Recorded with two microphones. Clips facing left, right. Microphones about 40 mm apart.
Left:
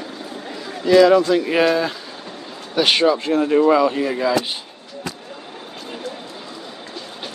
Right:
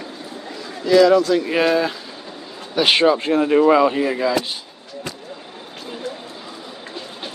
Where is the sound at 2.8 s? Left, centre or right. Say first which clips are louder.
Right 1 dB; centre.